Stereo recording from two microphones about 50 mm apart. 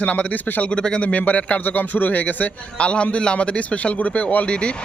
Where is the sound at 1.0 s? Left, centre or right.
Left.